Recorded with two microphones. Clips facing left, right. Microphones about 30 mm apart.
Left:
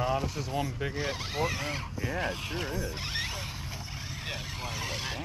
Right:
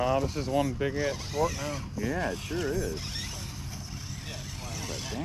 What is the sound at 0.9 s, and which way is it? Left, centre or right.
Speech, left.